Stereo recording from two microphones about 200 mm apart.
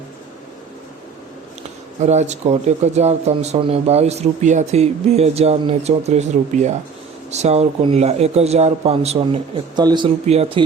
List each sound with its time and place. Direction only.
2.0 s a man's voice: 35° right (ahead or behind)